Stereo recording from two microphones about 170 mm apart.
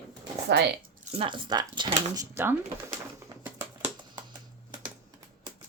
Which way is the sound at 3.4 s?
10° right (ahead or behind).